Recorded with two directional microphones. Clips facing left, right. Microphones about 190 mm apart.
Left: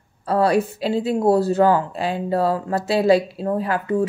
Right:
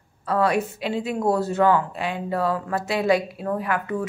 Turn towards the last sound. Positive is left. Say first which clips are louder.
# left 5 dB
turn(degrees=30)  # may be behind; listen again after turning